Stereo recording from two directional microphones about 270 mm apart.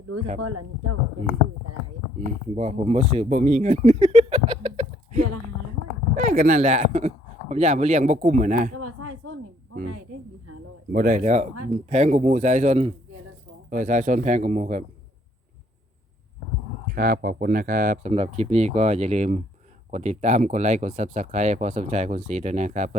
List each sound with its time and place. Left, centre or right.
0.3 s speech: right
2.6 s speech: right
8.7 s a sound: right
10.9 s speech: right
16.8 s speech: right